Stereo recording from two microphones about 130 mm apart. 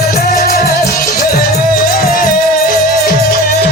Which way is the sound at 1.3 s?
90° left.